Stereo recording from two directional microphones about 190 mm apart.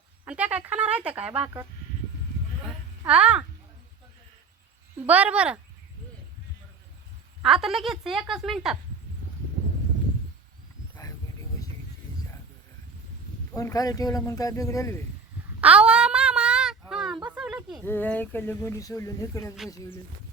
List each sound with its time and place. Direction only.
0.3 s speech: 5° right (ahead or behind)
3.1 s speech: 5° right (ahead or behind)
5.0 s speech: 5° right (ahead or behind)
7.4 s a woman's voice: centre (ahead or behind)
13.6 s speech: 20° left (ahead or behind)
15.6 s a sound: 5° right (ahead or behind)
17.8 s speech: 10° left (ahead or behind)